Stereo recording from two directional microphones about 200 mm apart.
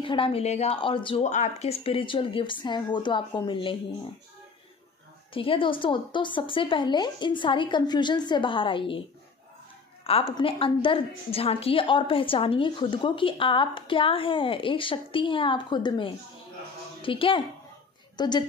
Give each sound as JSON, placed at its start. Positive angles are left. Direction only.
{"t": 0.0, "sound": "a woman's voice", "side_deg": 25}
{"t": 5.3, "sound": "a woman's voice", "side_deg": 25}
{"t": 10.0, "sound": "a woman's voice", "side_deg": 30}